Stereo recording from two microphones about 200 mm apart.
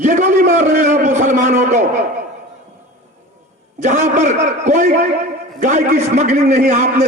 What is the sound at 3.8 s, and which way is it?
A man's voice, 35° right (ahead or behind).